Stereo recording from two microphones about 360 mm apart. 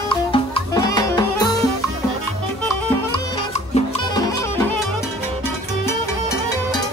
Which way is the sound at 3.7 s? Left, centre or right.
Centre.